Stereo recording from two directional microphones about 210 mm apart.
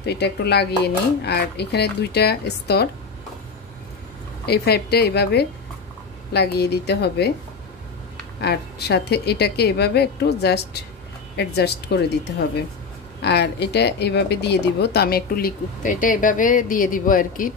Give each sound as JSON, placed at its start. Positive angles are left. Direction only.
{"t": 0.0, "sound": "speech", "side_deg": 50}
{"t": 4.5, "sound": "speech", "side_deg": 50}
{"t": 8.4, "sound": "speech", "side_deg": 50}